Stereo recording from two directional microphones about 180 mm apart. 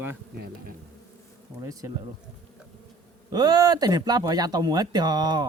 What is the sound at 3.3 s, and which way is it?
Speech, 20° right (ahead or behind).